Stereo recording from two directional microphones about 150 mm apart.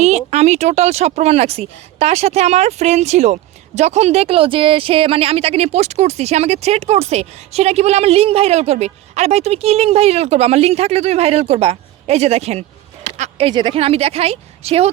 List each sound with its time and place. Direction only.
0.3 s speech: 45° right (ahead or behind)
13.1 s a sound: 50° right (ahead or behind)
13.5 s speech: 30° right (ahead or behind)